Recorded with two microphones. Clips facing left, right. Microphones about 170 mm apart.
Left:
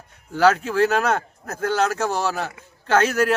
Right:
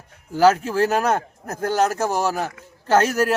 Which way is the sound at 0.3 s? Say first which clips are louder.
Right 1 dB; 10° right (ahead or behind).